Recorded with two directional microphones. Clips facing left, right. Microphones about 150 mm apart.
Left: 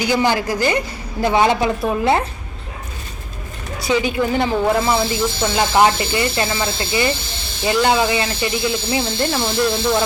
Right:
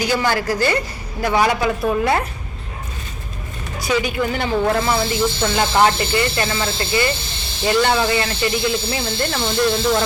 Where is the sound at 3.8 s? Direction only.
25° left (ahead or behind).